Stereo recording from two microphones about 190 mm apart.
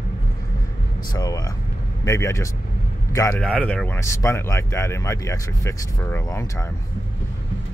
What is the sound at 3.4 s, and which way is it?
Speech, 5° left (ahead or behind).